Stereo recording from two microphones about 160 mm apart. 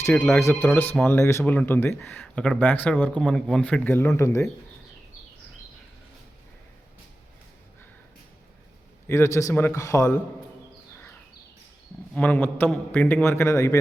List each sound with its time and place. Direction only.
0.0 s speech: 15° left (ahead or behind)
9.0 s speech: 20° left (ahead or behind)
12.1 s speech: 10° left (ahead or behind)